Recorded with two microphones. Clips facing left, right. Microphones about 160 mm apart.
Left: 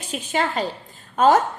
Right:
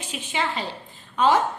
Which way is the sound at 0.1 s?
40° left (ahead or behind).